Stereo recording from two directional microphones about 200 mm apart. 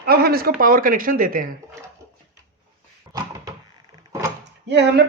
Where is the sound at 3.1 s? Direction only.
15° right (ahead or behind).